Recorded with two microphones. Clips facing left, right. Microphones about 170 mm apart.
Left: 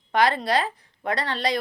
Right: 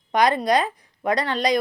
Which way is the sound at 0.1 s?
15° right (ahead or behind).